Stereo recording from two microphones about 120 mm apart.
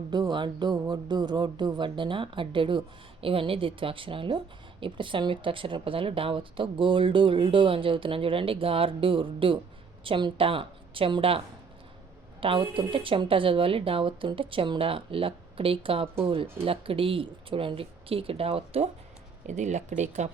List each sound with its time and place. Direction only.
0.1 s speech: 35° right (ahead or behind); by 18.9 s 55° right (ahead or behind)
19.5 s speech: 80° right